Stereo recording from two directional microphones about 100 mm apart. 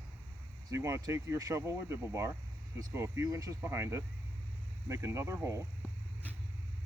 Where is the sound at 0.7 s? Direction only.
30° right (ahead or behind).